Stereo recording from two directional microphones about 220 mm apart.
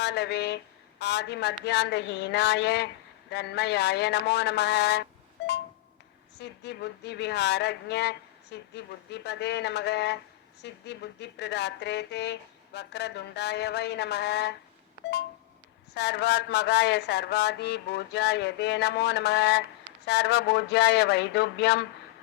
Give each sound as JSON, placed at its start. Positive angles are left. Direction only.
{"t": 0.0, "sound": "a woman's voice", "side_deg": 50}
{"t": 6.4, "sound": "a woman's voice", "side_deg": 50}
{"t": 16.0, "sound": "a woman's voice", "side_deg": 50}